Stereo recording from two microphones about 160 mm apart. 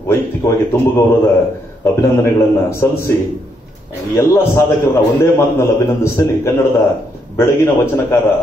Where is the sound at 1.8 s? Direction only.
15° left (ahead or behind).